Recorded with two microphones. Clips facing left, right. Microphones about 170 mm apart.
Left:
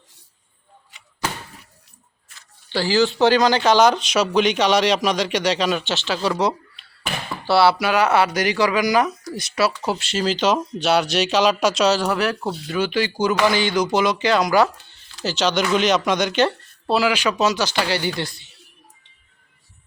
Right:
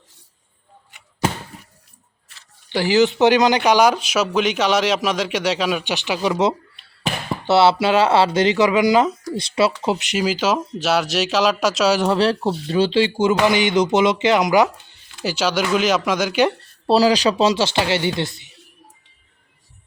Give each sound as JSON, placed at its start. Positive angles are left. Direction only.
{"t": 2.6, "sound": "speech", "side_deg": -15}
{"t": 11.9, "sound": "speech", "side_deg": -25}
{"t": 16.8, "sound": "speech", "side_deg": -35}